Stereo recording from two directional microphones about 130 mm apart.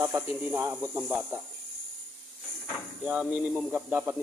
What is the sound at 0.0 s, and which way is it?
Speech, 20° right (ahead or behind).